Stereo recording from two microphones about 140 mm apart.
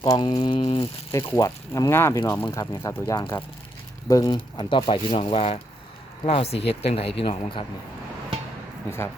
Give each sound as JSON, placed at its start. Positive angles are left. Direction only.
{"t": 0.0, "sound": "speech", "side_deg": 30}
{"t": 1.1, "sound": "speech", "side_deg": 25}
{"t": 4.5, "sound": "speech", "side_deg": 35}